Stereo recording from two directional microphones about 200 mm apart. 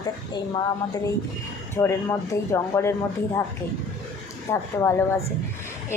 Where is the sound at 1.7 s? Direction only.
15° left (ahead or behind).